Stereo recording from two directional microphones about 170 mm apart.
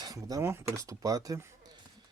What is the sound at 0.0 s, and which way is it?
Speech, 20° right (ahead or behind).